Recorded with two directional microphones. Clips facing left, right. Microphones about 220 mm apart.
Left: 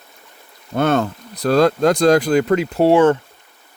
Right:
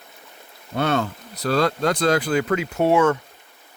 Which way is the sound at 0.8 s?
45° left (ahead or behind).